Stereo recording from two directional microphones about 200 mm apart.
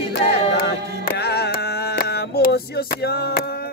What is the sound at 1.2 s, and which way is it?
Music, 55° left (ahead or behind).